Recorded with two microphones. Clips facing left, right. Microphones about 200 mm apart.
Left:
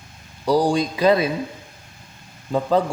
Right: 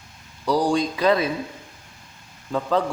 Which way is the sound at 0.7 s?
10° left (ahead or behind).